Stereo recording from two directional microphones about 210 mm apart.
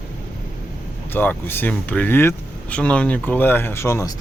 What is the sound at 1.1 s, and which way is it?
Speech, 10° left (ahead or behind).